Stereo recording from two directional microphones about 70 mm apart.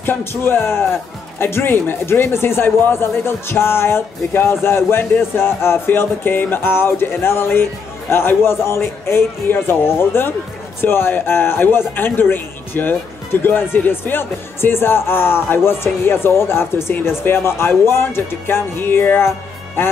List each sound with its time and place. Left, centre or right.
0.0 s speech: left